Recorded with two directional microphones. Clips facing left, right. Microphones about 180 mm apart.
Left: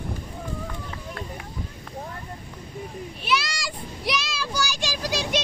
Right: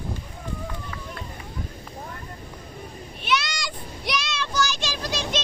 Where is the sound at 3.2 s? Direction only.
5° left (ahead or behind).